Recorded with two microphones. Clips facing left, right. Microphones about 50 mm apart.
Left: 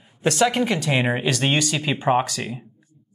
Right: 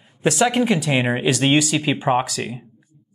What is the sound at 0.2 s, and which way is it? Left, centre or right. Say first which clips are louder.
Speech: right 2 dB; centre.